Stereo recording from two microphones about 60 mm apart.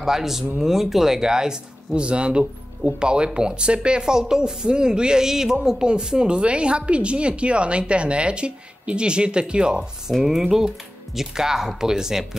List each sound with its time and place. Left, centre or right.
0.0 s speech: centre